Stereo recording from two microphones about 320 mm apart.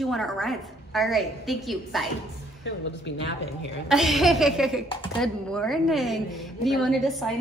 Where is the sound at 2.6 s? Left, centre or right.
Left.